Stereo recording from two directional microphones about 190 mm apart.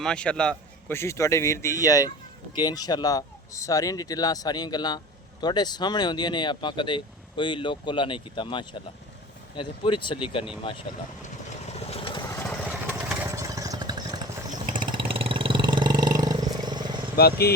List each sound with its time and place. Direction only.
0.0 s a man's voice: 5° left (ahead or behind); by 10.8 s 25° left (ahead or behind)
11.7 s vehicle: 30° left (ahead or behind)
12.9 s vehicle: 10° right (ahead or behind)
17.2 s speech: 55° left (ahead or behind)